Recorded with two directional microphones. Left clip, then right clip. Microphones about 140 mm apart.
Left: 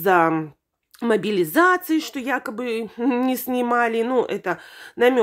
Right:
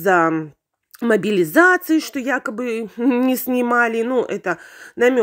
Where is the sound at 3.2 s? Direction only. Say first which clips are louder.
Right 3 dB; 30° right (ahead or behind).